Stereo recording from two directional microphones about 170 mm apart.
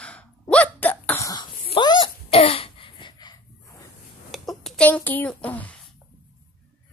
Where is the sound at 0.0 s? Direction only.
5° left (ahead or behind).